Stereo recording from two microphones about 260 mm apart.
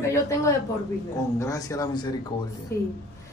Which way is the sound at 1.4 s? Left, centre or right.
Centre.